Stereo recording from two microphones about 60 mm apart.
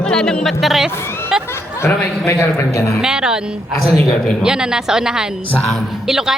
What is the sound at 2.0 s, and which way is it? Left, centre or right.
A man's voice, left.